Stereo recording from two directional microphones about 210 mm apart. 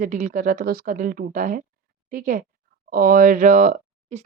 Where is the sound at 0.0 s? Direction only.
40° right (ahead or behind).